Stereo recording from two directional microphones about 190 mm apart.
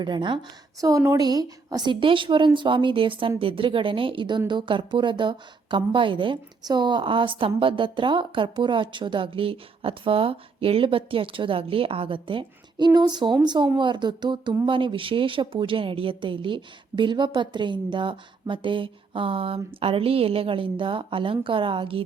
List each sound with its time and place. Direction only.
0.0 s a woman's voice: 25° right (ahead or behind)